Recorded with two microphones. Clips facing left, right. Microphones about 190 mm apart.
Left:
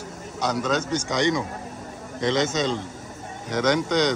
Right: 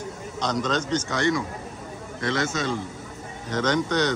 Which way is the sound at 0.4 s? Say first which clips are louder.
Left 1 dB; 10° left (ahead or behind).